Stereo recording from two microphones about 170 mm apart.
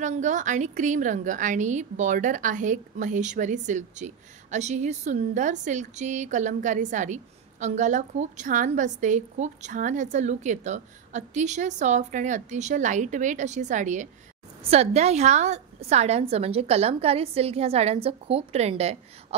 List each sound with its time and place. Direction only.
0.0 s a woman's voice: 45° right (ahead or behind)